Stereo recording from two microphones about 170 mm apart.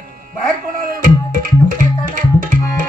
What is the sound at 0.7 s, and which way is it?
Tabla, 55° right (ahead or behind).